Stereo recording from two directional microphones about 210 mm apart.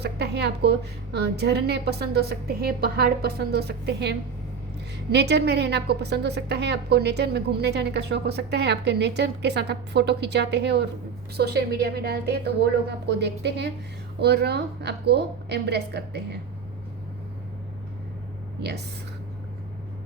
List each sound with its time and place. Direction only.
0.0 s a woman's voice: 50° right (ahead or behind)